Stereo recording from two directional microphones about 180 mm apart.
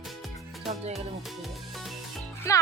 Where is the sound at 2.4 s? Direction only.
15° left (ahead or behind).